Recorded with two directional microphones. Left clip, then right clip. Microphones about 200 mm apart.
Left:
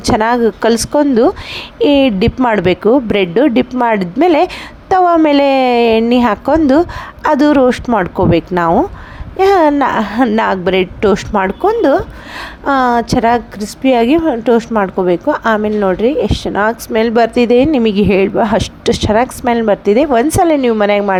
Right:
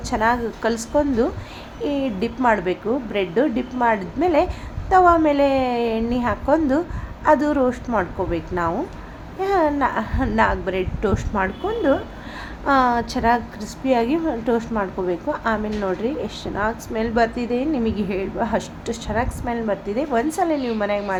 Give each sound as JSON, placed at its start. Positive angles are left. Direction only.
{"t": 0.0, "sound": "a woman's voice", "side_deg": 40}
{"t": 8.4, "sound": "a woman's voice", "side_deg": 40}
{"t": 11.4, "sound": "a woman's voice", "side_deg": 50}